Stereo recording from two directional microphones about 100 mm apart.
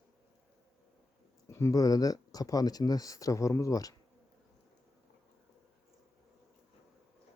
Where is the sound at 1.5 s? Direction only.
30° left (ahead or behind).